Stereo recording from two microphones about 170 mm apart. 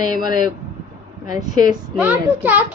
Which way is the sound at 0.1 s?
25° right (ahead or behind).